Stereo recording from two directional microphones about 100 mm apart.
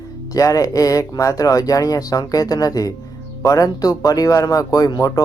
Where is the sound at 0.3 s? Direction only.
35° left (ahead or behind).